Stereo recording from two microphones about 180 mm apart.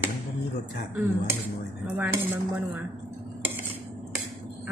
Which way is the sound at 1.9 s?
10° right (ahead or behind).